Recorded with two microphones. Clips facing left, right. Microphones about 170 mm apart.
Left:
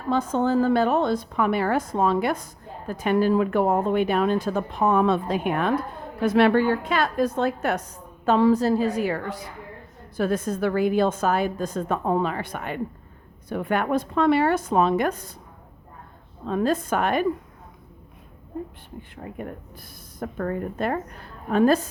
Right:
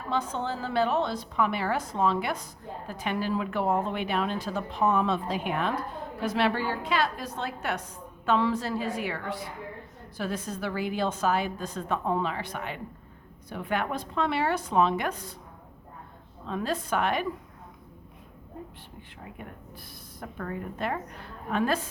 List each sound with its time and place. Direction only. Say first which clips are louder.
0.1 s a woman's voice: left 9 dB; 45° left (ahead or behind)
16.5 s a woman's voice: left 7 dB; 50° left (ahead or behind)
19.1 s a woman's voice: left 9 dB; 50° left (ahead or behind)